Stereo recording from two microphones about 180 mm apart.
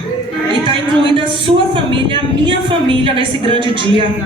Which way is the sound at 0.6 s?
30° right (ahead or behind).